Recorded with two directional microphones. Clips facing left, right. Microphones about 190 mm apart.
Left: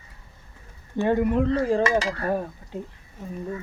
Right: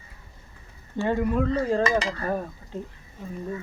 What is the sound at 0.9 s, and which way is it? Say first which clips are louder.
Speech: left 3 dB; 20° left (ahead or behind).